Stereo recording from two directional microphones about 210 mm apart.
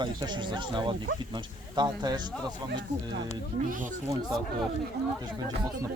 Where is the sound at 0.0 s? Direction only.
20° right (ahead or behind).